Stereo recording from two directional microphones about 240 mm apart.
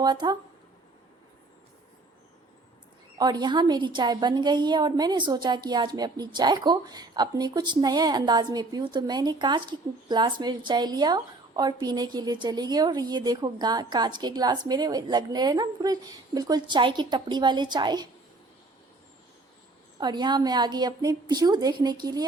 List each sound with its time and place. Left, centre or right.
0.0 s a woman's voice: centre
3.2 s a woman's voice: centre
20.0 s a woman's voice: centre